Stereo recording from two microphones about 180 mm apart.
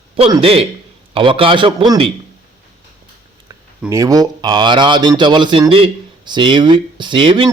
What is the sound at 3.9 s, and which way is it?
Speech, 20° right (ahead or behind).